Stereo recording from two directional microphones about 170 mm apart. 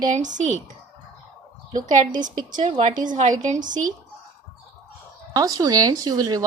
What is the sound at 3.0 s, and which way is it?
Speech, 45° right (ahead or behind).